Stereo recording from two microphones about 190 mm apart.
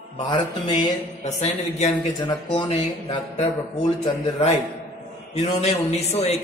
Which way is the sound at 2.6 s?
25° left (ahead or behind).